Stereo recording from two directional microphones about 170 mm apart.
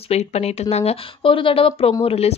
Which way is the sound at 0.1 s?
40° left (ahead or behind).